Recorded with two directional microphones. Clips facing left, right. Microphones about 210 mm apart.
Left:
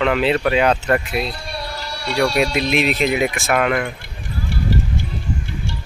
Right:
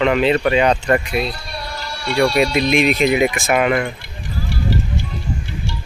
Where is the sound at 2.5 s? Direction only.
Centre (ahead or behind).